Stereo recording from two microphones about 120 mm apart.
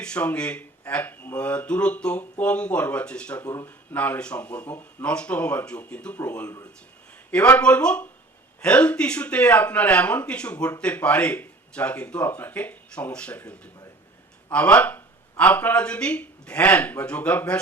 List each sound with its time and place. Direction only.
0.0 s speech: 10° left (ahead or behind)
3.4 s speech: 25° left (ahead or behind)
3.9 s speech: 15° left (ahead or behind)